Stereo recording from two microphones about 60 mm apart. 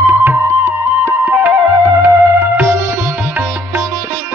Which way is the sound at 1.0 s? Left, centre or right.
Right.